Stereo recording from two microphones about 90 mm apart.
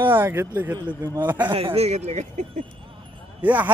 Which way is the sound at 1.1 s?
20° right (ahead or behind).